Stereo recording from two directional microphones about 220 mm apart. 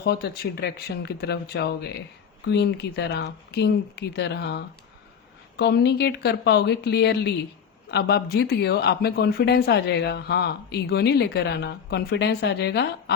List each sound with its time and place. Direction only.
0.0 s speech: 50° left (ahead or behind)